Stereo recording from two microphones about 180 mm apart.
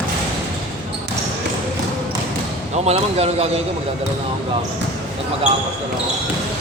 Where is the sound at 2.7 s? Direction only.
35° right (ahead or behind).